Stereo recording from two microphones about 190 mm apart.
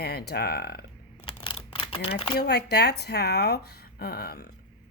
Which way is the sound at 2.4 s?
60° left (ahead or behind).